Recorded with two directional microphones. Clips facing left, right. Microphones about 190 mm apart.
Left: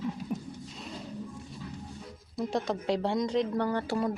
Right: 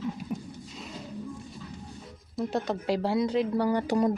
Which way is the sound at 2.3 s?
Centre (ahead or behind).